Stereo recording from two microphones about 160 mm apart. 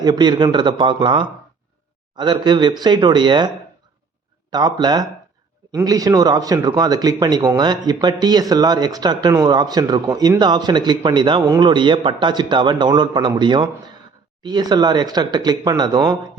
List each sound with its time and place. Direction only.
0.0 s speech: 25° right (ahead or behind)
4.5 s speech: 25° right (ahead or behind)